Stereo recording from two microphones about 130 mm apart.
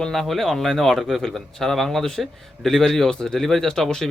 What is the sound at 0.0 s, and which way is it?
A man's voice, centre (ahead or behind).